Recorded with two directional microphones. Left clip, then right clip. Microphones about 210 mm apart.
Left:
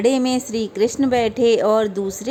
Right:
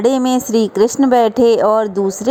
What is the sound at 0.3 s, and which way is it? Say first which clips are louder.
A woman's voice: right 7 dB; 20° right (ahead or behind).